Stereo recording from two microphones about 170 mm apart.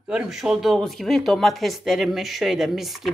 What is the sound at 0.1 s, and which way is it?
A woman's voice, 5° right (ahead or behind).